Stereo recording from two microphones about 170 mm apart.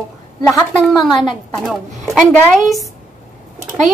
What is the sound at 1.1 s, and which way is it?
Speech, 25° left (ahead or behind).